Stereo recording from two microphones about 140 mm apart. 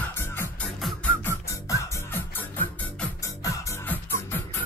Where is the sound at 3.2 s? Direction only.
25° left (ahead or behind).